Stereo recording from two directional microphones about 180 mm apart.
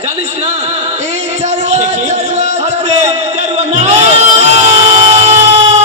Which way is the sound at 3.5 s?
40° right (ahead or behind).